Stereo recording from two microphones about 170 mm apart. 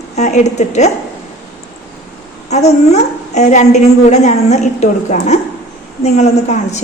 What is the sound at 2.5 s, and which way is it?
A woman's voice, 40° left (ahead or behind).